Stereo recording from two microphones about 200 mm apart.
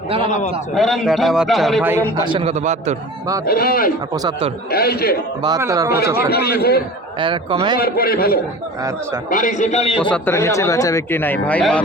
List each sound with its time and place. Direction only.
0.3 s a man's voice: 40° left (ahead or behind)
0.7 s a man's voice: centre (ahead or behind)
1.9 s a man's voice: 15° right (ahead or behind); by 3.0 s 35° right (ahead or behind)
3.4 s a man's voice: 50° left (ahead or behind)
4.1 s a man's voice: 20° right (ahead or behind)
4.7 s a man's voice: 50° left (ahead or behind)
5.4 s speech: 15° right (ahead or behind)
6.1 s a man's voice: 50° left (ahead or behind)
7.2 s a man's voice: 25° right (ahead or behind)
7.8 s a man's voice: 50° left (ahead or behind); by 10.0 s 30° left (ahead or behind)
10.0 s speech: 10° left (ahead or behind)